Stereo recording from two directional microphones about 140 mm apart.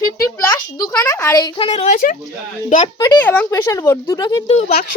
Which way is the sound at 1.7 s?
65° left (ahead or behind).